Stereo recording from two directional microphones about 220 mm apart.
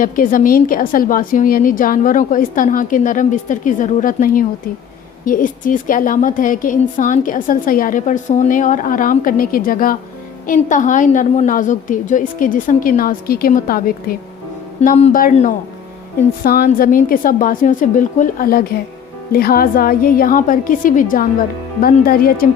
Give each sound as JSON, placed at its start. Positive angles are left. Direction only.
{"t": 0.0, "sound": "a woman's voice", "side_deg": 40}
{"t": 14.8, "sound": "a woman's voice", "side_deg": 30}